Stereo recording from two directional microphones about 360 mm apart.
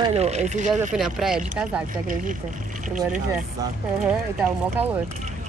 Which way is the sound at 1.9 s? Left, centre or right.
Right.